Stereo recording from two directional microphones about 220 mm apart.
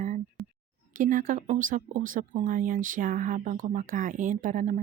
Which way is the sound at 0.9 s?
35° right (ahead or behind).